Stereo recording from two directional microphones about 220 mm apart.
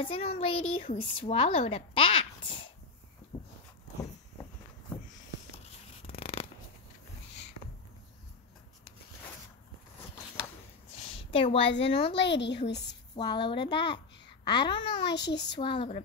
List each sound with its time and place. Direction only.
0.0 s a woman's voice: 25° left (ahead or behind)
3.3 s a sound: 15° left (ahead or behind)
5.6 s a sound: 25° left (ahead or behind)
11.3 s a woman's voice: 25° left (ahead or behind)
11.6 s speech: 55° left (ahead or behind)
13.1 s a woman's voice: 20° left (ahead or behind)
15.1 s speech: 50° left (ahead or behind)
15.5 s a woman's voice: 20° left (ahead or behind)